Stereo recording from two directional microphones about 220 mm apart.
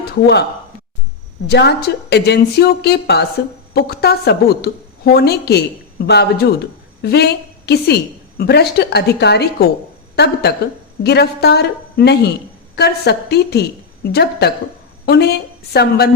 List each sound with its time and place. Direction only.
0.0 s speech: 50° left (ahead or behind)
1.5 s a woman's voice: 50° left (ahead or behind)
11.0 s a woman's voice: 50° left (ahead or behind)